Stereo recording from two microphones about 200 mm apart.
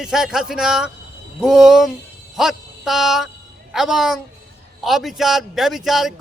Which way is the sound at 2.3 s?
Centre (ahead or behind).